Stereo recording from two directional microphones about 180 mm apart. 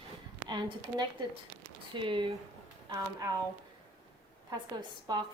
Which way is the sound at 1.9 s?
25° right (ahead or behind).